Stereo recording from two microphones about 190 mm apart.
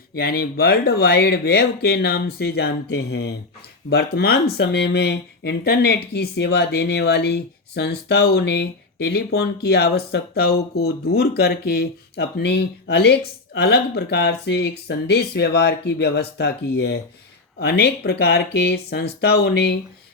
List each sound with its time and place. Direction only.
0.2 s speech: 55° left (ahead or behind)